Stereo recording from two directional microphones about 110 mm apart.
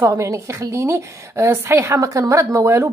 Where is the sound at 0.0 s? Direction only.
30° right (ahead or behind).